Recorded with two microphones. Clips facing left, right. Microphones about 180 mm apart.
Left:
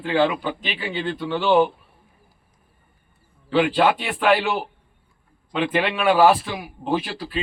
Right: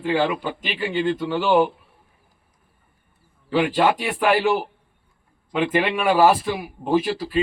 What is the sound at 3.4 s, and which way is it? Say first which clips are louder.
A man's voice: left 1 dB; 5° right (ahead or behind).